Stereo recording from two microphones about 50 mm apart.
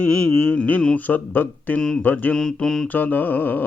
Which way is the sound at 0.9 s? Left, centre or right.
Left.